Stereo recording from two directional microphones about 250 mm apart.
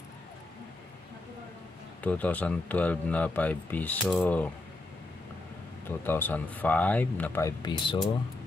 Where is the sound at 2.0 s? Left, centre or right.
Centre.